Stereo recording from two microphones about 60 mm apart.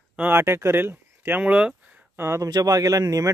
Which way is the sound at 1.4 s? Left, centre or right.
Right.